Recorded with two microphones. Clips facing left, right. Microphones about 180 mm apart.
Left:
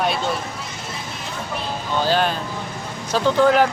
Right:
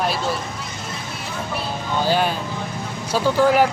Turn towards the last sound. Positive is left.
turn(degrees=-10)  # may be behind; listen again after turning